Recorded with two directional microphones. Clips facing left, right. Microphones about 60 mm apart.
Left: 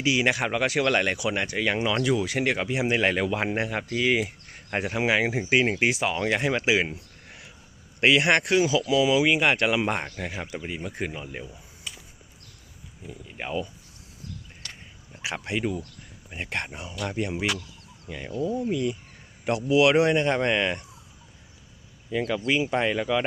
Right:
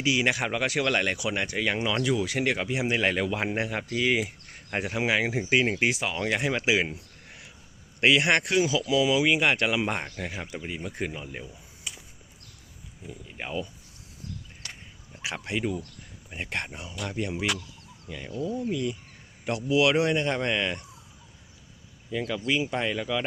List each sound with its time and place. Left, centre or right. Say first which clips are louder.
0.0 s speech: left 2 dB; centre
2.9 s speech: left 2 dB; centre
5.8 s speech: left 2 dB; centre
6.6 s speech: even; centre
8.0 s speech: left 2 dB; centre
11.9 s a sound: even; centre
13.3 s speech: left 3 dB; centre
14.6 s a sound: even; centre
15.2 s speech: left 2 dB; centre
17.1 s speech: left 1 dB; left
22.3 s speech: left 2 dB; left